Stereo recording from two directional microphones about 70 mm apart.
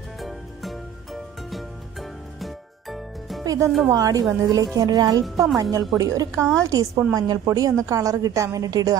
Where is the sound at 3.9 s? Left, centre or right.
Right.